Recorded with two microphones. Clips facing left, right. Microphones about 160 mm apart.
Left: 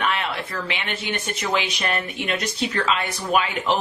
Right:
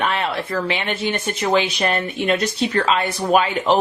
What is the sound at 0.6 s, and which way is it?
Speech, 35° right (ahead or behind).